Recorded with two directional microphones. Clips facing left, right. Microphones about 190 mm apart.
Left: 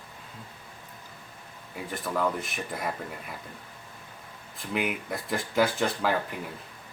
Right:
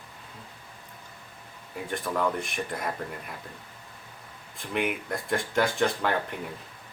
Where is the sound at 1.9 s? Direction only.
Centre (ahead or behind).